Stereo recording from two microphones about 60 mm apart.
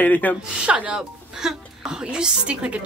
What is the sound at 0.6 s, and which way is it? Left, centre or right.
A woman's voice, centre.